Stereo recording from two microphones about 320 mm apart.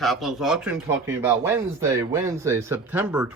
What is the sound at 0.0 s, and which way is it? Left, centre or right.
Speech, centre.